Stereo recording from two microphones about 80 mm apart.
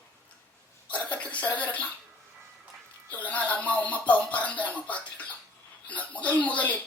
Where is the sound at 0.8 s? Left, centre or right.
Centre.